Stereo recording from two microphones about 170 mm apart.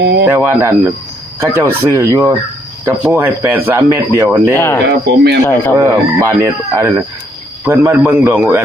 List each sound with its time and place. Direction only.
0.0 s speech: 75° right (ahead or behind)
0.3 s speech: 15° right (ahead or behind)
4.5 s speech: 15° left (ahead or behind)
4.9 s speech: 75° right (ahead or behind)
5.7 s speech: 15° right (ahead or behind)